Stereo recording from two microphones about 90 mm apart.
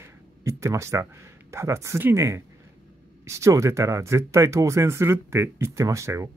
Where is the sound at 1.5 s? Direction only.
30° right (ahead or behind).